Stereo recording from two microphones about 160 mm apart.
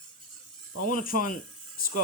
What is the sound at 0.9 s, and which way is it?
Speech, 60° left (ahead or behind).